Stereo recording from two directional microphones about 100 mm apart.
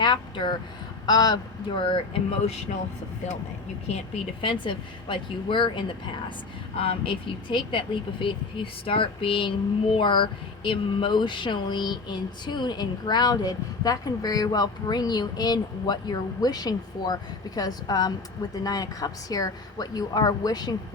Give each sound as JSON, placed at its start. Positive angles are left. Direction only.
{"t": 0.0, "sound": "speech", "side_deg": 50}
{"t": 1.7, "sound": "speech", "side_deg": 60}
{"t": 4.4, "sound": "speech", "side_deg": 60}